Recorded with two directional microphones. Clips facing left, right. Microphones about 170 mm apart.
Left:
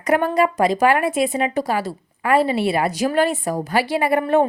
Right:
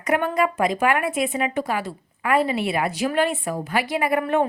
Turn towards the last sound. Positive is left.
turn(degrees=30)  # may be behind; listen again after turning